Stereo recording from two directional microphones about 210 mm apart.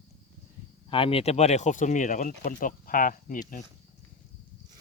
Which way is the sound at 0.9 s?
25° left (ahead or behind).